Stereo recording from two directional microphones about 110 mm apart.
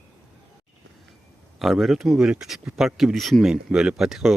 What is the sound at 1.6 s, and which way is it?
Speech, centre (ahead or behind).